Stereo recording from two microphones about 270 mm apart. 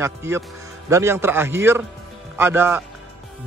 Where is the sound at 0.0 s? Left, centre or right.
Centre.